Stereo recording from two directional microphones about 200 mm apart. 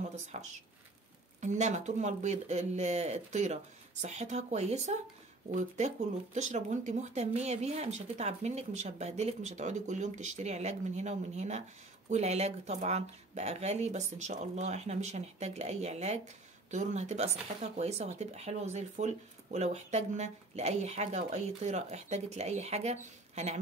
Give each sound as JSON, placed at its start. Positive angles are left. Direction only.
{"t": 0.1, "sound": "a woman's voice", "side_deg": -35}